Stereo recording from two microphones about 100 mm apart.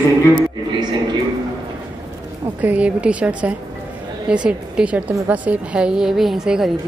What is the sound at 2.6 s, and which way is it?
A woman's voice, 15° right (ahead or behind).